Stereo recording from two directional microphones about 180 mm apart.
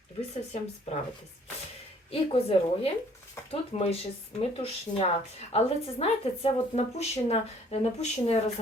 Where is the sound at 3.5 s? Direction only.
35° left (ahead or behind).